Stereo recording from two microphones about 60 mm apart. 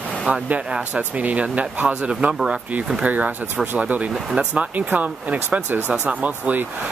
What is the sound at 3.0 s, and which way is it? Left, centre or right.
Speech, right.